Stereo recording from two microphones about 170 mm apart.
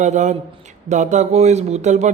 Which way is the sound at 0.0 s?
45° right (ahead or behind).